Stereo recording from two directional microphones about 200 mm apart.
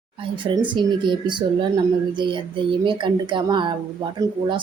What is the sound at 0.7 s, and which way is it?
Speech, 25° right (ahead or behind).